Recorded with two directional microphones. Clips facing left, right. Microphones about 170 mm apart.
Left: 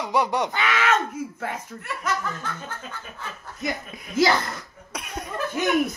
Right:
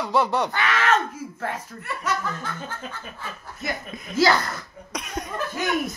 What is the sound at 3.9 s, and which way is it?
Speech, 15° left (ahead or behind).